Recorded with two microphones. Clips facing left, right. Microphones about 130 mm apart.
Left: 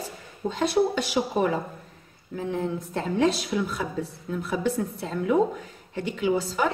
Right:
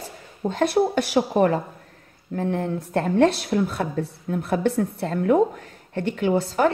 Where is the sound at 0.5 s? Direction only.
55° right (ahead or behind).